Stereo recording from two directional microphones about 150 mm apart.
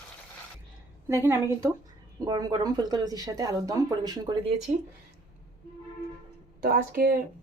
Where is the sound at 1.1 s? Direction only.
15° right (ahead or behind).